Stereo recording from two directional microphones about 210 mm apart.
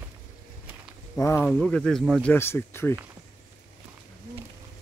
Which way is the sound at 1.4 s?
Centre (ahead or behind).